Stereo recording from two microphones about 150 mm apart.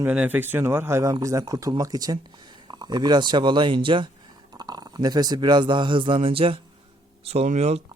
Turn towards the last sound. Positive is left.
turn(degrees=-45)  # may be behind; listen again after turning